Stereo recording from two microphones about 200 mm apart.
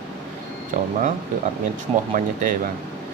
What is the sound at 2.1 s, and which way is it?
Speech, 40° right (ahead or behind).